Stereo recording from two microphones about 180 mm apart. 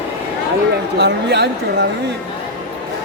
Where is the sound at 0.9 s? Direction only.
70° right (ahead or behind).